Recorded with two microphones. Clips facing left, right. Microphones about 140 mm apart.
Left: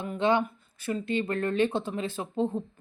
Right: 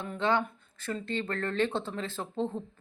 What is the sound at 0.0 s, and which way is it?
Speech, 15° left (ahead or behind).